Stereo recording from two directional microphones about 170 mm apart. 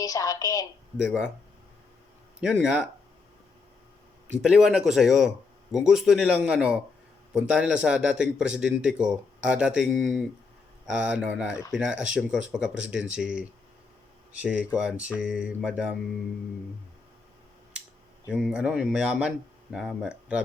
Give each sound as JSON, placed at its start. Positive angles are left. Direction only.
{"t": 0.0, "sound": "a sound", "side_deg": 20}
{"t": 0.9, "sound": "speech", "side_deg": -5}
{"t": 2.4, "sound": "speech", "side_deg": -5}
{"t": 4.4, "sound": "speech", "side_deg": -5}
{"t": 14.4, "sound": "speech", "side_deg": -5}
{"t": 18.3, "sound": "speech", "side_deg": -5}